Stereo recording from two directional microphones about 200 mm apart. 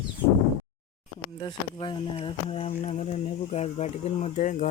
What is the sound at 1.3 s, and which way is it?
Speech, 25° left (ahead or behind).